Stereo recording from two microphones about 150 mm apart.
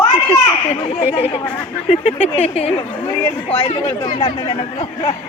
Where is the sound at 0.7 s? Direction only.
40° left (ahead or behind).